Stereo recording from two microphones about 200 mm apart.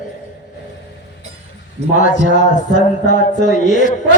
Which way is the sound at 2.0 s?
40° left (ahead or behind).